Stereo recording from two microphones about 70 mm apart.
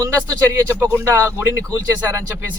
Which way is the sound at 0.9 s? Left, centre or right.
Right.